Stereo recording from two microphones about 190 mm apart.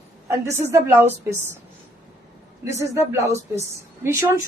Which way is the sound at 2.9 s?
15° right (ahead or behind).